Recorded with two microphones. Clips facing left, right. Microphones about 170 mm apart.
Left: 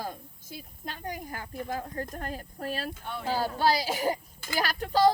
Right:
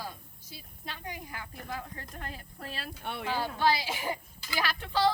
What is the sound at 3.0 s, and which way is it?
Speech, 70° right (ahead or behind).